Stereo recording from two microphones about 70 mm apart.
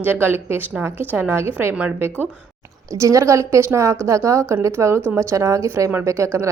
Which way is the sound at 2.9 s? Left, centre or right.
Right.